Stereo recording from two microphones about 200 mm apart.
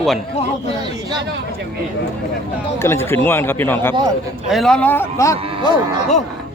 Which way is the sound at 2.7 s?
10° left (ahead or behind).